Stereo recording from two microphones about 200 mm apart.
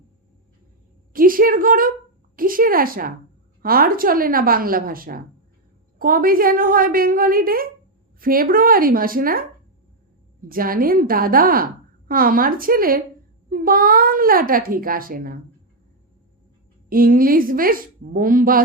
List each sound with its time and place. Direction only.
1.1 s a woman's voice: 45° right (ahead or behind)
10.5 s a child's voice: 45° right (ahead or behind)
16.9 s a child's voice: 45° right (ahead or behind)